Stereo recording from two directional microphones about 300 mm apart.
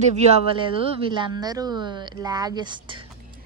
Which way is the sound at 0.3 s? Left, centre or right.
Centre.